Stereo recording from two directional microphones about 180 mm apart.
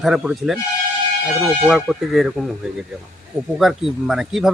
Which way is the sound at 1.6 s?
5° right (ahead or behind).